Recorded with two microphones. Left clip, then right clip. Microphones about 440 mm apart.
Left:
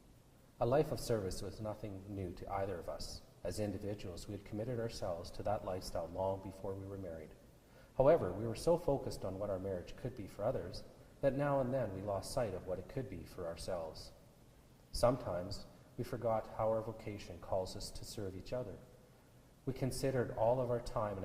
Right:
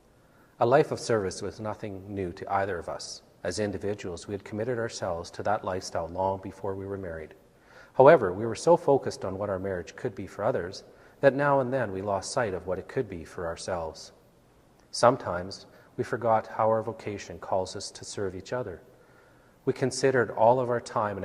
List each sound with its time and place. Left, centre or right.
0.6 s speech: right
7.9 s speech: right
14.9 s speech: right
19.6 s speech: right